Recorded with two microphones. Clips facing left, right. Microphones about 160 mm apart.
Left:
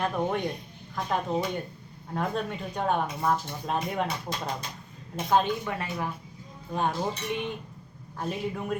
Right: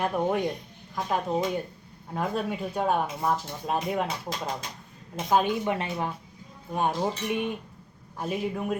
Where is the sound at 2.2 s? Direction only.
5° right (ahead or behind).